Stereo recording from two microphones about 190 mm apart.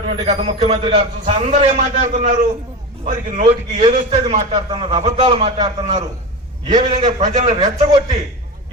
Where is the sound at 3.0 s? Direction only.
40° right (ahead or behind).